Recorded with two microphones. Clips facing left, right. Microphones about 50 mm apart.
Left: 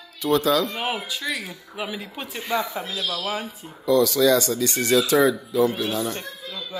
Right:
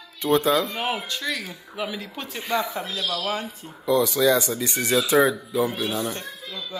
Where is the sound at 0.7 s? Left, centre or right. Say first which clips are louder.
Even; centre.